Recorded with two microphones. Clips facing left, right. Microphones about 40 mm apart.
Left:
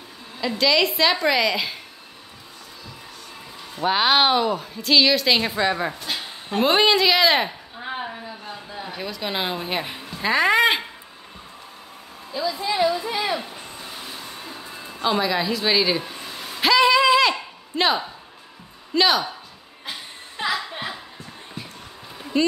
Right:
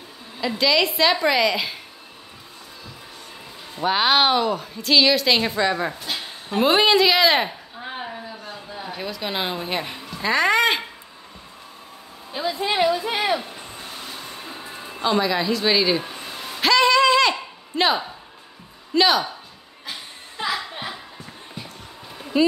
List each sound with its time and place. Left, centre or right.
0.4 s a woman's voice: centre
3.7 s a woman's voice: centre
12.3 s a woman's voice: right
13.4 s a sound: centre
13.8 s music: centre
14.3 s music: centre
15.0 s a sound: centre
18.9 s a woman's voice: centre
22.2 s a sound: centre